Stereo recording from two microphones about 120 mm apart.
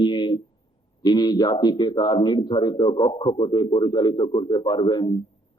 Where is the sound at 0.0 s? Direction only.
40° left (ahead or behind).